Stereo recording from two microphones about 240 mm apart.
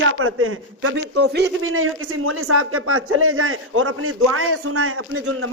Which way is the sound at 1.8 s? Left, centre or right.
Right.